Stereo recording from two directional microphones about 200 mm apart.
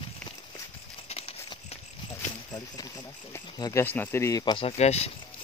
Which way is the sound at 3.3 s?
15° left (ahead or behind).